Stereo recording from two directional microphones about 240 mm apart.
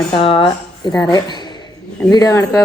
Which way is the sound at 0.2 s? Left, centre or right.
Left.